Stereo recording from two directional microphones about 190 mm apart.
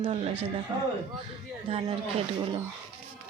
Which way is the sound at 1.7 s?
30° right (ahead or behind).